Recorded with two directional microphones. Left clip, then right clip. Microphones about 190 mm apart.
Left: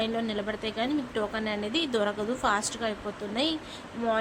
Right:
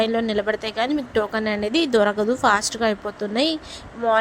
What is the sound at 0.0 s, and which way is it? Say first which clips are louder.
A woman's voice: right 9 dB; 35° right (ahead or behind).